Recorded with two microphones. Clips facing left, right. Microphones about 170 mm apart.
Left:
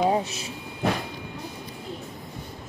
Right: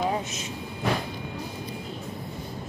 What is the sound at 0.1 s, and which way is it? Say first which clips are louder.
Vehicle: left 4 dB; 35° left (ahead or behind).